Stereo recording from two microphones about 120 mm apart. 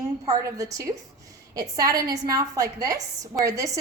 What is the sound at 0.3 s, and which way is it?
A woman's voice, 30° right (ahead or behind).